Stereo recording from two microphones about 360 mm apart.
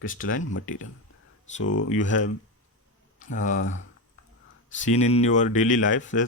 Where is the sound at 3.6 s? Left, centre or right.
Left.